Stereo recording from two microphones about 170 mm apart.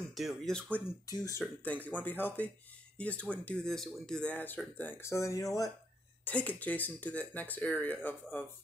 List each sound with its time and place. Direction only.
0.1 s speech: centre (ahead or behind)
1.0 s speech: 20° left (ahead or behind)
1.4 s speech: 10° left (ahead or behind)